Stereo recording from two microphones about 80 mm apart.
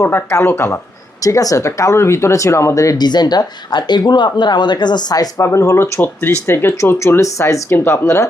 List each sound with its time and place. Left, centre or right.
0.0 s speech: left
1.2 s speech: left
3.0 s speech: left
5.5 s speech: left